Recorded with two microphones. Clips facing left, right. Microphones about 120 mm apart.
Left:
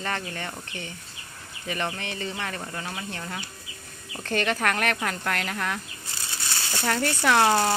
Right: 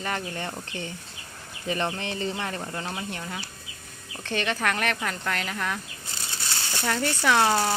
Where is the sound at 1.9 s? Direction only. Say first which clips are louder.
Right 3 dB; 25° right (ahead or behind).